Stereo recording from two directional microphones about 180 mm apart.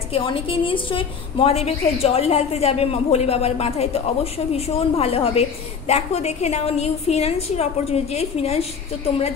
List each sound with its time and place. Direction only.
0.1 s a woman's voice: 30° left (ahead or behind)